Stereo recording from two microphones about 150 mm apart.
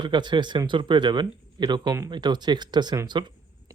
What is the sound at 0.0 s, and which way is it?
Speech, 30° right (ahead or behind).